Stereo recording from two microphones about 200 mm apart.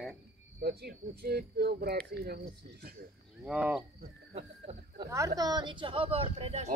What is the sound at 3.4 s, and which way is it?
Speech, 5° right (ahead or behind).